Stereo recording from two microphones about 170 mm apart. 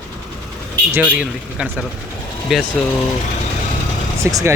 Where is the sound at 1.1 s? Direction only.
5° right (ahead or behind).